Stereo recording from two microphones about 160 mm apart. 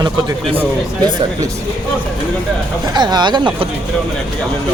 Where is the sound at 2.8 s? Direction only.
25° right (ahead or behind).